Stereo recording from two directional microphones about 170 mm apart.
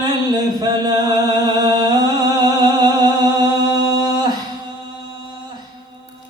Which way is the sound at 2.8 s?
25° right (ahead or behind).